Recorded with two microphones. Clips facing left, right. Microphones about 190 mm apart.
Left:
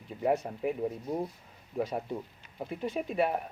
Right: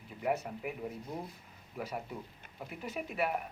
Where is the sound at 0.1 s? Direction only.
25° left (ahead or behind).